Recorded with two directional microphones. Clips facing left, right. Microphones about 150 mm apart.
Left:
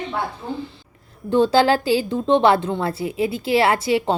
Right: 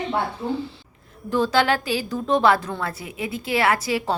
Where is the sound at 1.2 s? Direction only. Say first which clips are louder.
Left 4 dB; 30° left (ahead or behind).